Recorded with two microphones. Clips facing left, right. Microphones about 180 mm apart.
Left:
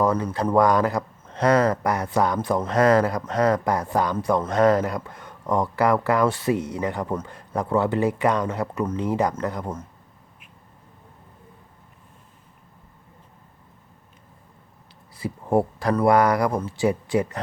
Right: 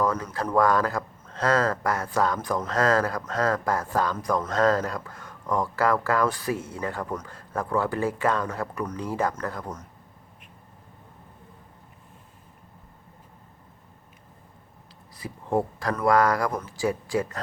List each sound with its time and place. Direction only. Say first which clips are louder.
0.0 s speech: left 4 dB; 30° left (ahead or behind)
2.4 s speech: left 5 dB; 25° left (ahead or behind)
4.2 s speech: left 4 dB; 25° left (ahead or behind)
4.5 s speech: left 4 dB; 15° left (ahead or behind)
15.2 s speech: left 4 dB; 30° left (ahead or behind)